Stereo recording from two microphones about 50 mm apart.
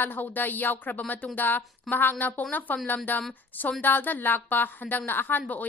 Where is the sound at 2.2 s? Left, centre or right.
Left.